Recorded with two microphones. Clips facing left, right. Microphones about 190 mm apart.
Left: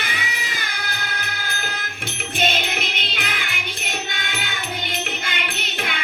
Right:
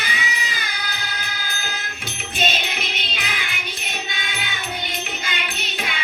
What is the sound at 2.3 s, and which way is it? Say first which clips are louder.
Music: left 2 dB; 55° left (ahead or behind).